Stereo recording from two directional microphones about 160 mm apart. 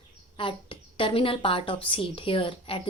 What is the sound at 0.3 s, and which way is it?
A woman's voice, 35° left (ahead or behind).